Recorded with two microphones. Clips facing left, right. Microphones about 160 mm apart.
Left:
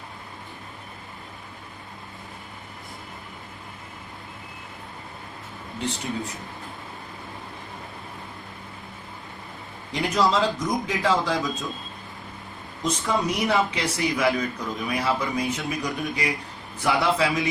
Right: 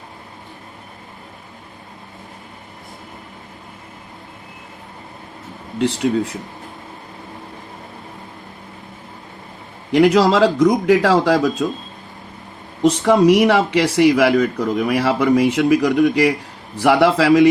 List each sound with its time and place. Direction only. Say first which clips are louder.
5.8 s speech: right 12 dB; 80° right
9.9 s speech: right 10 dB; 75° right (ahead or behind)
12.8 s speech: right 12 dB; 70° right (ahead or behind)